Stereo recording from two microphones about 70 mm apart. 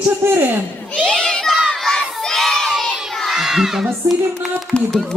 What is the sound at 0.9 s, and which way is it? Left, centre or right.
Crowd, centre.